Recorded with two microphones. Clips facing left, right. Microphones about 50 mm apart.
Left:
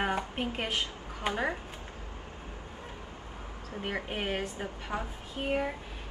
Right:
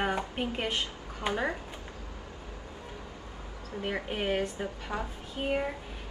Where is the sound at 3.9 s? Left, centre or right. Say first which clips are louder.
Right 2 dB; centre.